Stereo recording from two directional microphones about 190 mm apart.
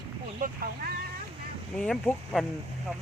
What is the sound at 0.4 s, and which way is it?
Speech, 45° right (ahead or behind).